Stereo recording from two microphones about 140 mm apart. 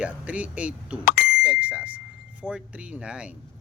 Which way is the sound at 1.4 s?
10° right (ahead or behind).